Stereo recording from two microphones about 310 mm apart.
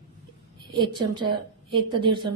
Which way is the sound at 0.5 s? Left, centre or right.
Centre.